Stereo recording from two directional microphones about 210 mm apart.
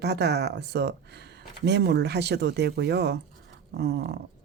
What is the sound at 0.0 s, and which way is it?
A woman's voice, 50° right (ahead or behind).